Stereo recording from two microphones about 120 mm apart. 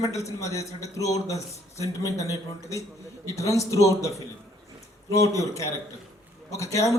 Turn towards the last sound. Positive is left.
turn(degrees=25)  # may be behind; listen again after turning